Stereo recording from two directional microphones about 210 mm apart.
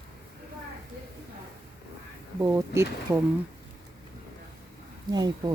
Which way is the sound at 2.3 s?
15° right (ahead or behind).